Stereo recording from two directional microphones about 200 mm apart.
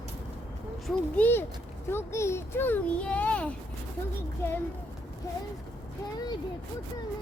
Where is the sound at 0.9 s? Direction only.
5° left (ahead or behind).